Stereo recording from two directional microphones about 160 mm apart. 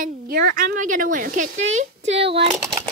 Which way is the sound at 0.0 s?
65° right (ahead or behind).